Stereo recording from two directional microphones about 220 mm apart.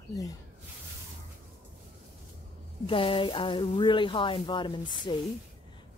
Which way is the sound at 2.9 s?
25° left (ahead or behind).